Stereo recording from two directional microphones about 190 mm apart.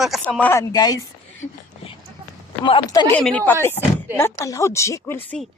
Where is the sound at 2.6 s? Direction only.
25° left (ahead or behind).